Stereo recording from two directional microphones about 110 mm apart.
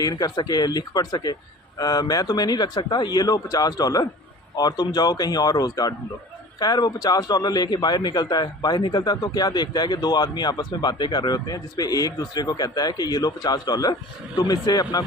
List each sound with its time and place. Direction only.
0.0 s a man's voice: 35° left (ahead or behind)